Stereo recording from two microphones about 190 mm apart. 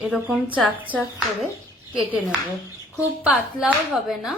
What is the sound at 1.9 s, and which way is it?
A woman's voice, 5° right (ahead or behind).